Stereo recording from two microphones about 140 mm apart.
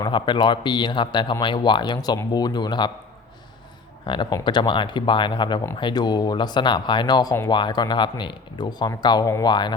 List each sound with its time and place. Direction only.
0.0 s speech: 35° left (ahead or behind)
4.0 s speech: 35° left (ahead or behind)